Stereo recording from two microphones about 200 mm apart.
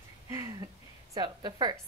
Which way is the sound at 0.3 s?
15° right (ahead or behind).